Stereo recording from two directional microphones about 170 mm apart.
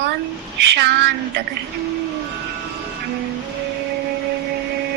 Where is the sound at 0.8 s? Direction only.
80° right.